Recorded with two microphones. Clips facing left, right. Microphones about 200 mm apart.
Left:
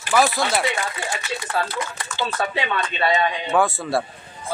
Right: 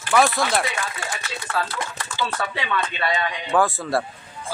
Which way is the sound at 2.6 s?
25° left (ahead or behind).